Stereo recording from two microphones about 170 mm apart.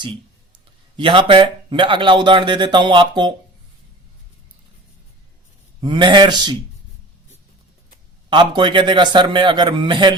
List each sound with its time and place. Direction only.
0.9 s speech: 30° right (ahead or behind)
5.8 s speech: 25° right (ahead or behind)
8.3 s speech: 30° right (ahead or behind)